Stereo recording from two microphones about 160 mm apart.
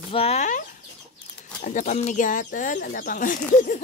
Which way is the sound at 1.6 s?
55° left (ahead or behind).